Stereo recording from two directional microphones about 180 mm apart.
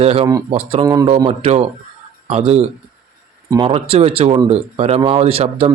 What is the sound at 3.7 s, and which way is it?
A man's voice, 35° right (ahead or behind).